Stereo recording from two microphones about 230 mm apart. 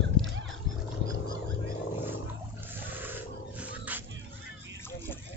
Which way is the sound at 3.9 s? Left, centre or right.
Centre.